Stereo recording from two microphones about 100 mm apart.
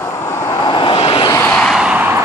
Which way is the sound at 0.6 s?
55° left (ahead or behind).